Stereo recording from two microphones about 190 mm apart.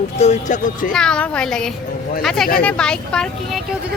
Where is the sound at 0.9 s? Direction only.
5° left (ahead or behind).